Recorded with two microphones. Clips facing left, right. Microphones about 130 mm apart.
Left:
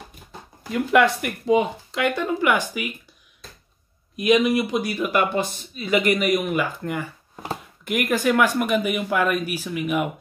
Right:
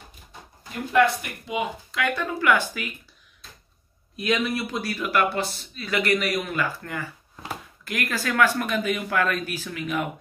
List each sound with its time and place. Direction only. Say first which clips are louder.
0.7 s speech: left 3 dB; 75° left (ahead or behind)
1.5 s speech: left 9 dB; 30° left (ahead or behind)
4.2 s speech: left 7 dB; 15° left (ahead or behind)